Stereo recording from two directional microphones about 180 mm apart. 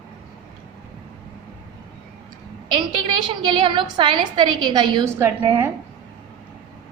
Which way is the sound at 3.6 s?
25° right (ahead or behind).